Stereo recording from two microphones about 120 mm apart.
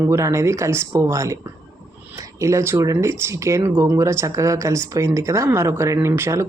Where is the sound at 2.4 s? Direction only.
25° right (ahead or behind).